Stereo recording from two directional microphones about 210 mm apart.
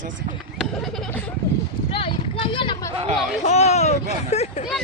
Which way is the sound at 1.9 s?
25° left (ahead or behind).